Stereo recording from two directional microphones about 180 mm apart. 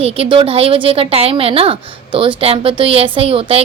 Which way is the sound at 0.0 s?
30° right (ahead or behind).